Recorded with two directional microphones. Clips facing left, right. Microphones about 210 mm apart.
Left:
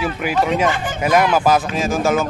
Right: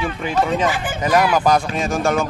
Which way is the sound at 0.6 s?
5° right (ahead or behind).